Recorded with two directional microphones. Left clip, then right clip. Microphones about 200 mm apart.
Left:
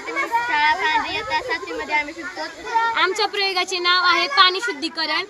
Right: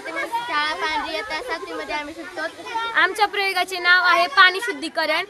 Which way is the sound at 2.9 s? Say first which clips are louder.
Right 1 dB; 30° right (ahead or behind).